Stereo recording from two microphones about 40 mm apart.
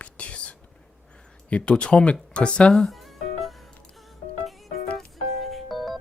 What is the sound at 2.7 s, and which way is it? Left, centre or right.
Music, centre.